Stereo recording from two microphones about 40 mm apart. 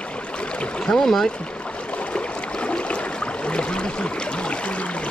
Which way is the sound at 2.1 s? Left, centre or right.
Left.